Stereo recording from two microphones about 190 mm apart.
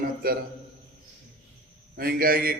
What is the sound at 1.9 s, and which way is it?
Speech, 50° right (ahead or behind).